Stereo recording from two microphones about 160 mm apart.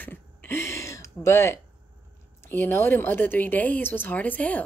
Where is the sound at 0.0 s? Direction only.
15° left (ahead or behind).